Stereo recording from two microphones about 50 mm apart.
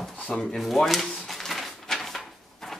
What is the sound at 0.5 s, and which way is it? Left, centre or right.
Speech, centre.